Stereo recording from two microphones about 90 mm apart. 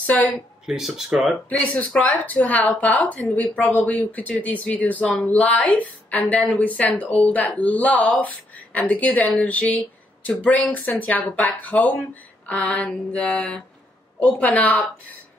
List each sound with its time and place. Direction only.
0.0 s speech: 15° left (ahead or behind)
0.7 s speech: 5° right (ahead or behind)
1.5 s a woman's voice: 15° left (ahead or behind)